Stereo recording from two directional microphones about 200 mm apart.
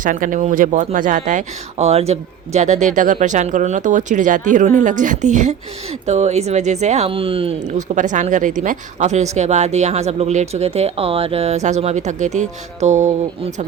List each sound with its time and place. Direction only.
0.0 s speech: 40° right (ahead or behind)